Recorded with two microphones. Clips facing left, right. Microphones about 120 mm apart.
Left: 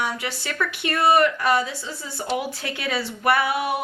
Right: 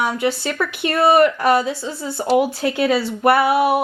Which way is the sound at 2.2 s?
45° right (ahead or behind).